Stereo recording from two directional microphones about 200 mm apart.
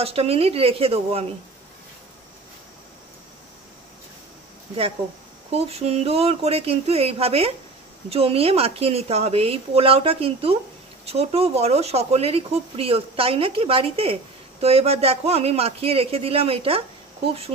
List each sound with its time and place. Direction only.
0.0 s speech: 30° right (ahead or behind)
5.5 s speech: 30° right (ahead or behind)